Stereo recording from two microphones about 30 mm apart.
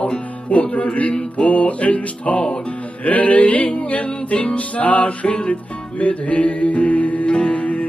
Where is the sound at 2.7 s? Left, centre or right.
Left.